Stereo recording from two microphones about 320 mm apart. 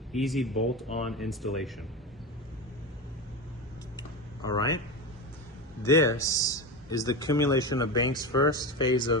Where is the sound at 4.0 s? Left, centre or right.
Centre.